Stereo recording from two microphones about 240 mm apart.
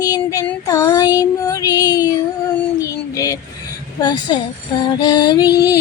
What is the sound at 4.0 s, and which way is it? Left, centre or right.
Speech, centre.